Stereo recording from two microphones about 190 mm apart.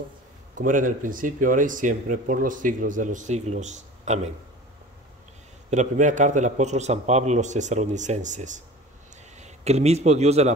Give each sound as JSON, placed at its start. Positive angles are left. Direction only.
{"t": 0.6, "sound": "speech", "side_deg": -45}
{"t": 5.7, "sound": "a man's voice", "side_deg": -40}